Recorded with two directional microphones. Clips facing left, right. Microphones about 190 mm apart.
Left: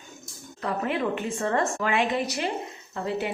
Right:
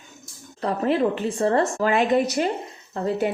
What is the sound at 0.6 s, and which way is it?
A woman's voice, 35° right (ahead or behind).